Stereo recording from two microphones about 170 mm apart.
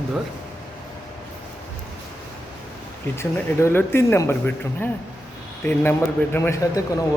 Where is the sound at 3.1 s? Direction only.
15° left (ahead or behind).